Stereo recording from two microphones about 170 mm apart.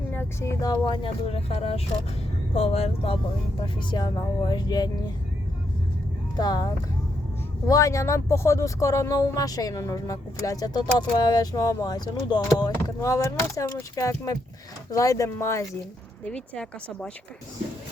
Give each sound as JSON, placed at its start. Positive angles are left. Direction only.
{"t": 0.1, "sound": "speech", "side_deg": 15}
{"t": 3.6, "sound": "speech", "side_deg": 25}
{"t": 6.3, "sound": "speech", "side_deg": 25}
{"t": 7.7, "sound": "speech", "side_deg": 20}
{"t": 16.3, "sound": "speech", "side_deg": 5}